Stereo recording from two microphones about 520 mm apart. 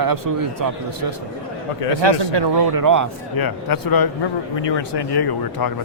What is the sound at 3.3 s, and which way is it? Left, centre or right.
Speech, left.